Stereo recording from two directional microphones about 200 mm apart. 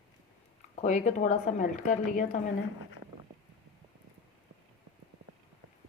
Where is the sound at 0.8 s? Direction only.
35° left (ahead or behind).